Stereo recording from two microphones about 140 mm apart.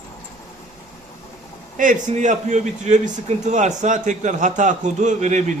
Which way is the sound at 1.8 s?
65° right (ahead or behind).